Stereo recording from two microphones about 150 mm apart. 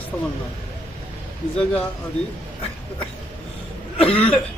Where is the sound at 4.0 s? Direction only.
40° left (ahead or behind).